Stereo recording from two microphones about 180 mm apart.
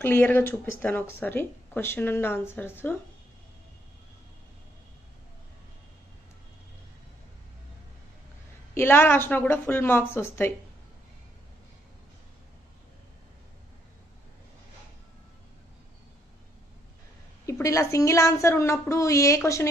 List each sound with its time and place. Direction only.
0.0 s speech: 10° left (ahead or behind)
8.7 s speech: 10° left (ahead or behind)
17.5 s speech: 15° left (ahead or behind)